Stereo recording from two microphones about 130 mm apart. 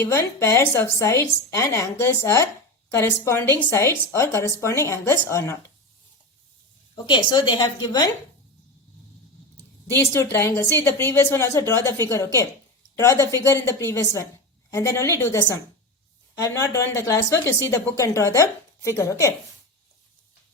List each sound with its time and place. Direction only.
0.0 s a woman's voice: 20° left (ahead or behind)
6.9 s a woman's voice: 35° left (ahead or behind)
9.9 s a woman's voice: 20° left (ahead or behind)